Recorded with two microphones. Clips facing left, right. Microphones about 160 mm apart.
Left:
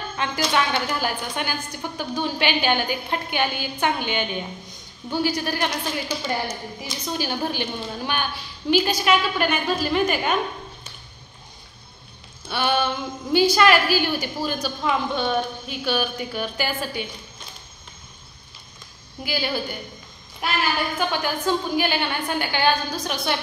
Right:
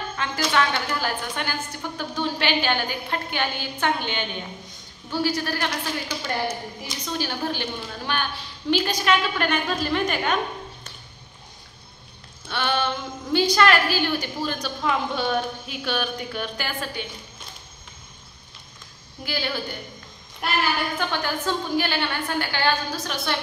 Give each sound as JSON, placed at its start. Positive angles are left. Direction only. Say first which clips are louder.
{"t": 0.2, "sound": "a woman's voice", "louder": "even", "side_deg": 15}
{"t": 12.4, "sound": "a woman's voice", "louder": "left 2 dB", "side_deg": 10}
{"t": 19.2, "sound": "a woman's voice", "louder": "left 2 dB", "side_deg": 10}
{"t": 21.1, "sound": "a woman's voice", "louder": "left 3 dB", "side_deg": 15}